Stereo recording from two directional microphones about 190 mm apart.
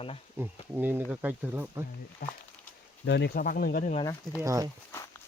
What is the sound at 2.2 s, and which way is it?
Speech, 50° left (ahead or behind).